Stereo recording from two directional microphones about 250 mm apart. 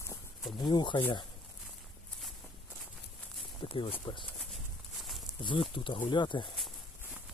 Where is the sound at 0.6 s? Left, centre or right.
Centre.